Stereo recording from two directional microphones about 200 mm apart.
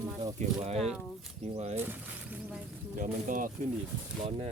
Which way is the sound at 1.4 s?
30° right (ahead or behind).